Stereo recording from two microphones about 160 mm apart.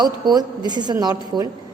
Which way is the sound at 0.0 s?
25° right (ahead or behind).